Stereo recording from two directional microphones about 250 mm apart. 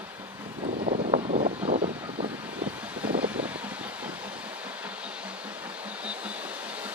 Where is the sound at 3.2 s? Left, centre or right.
Centre.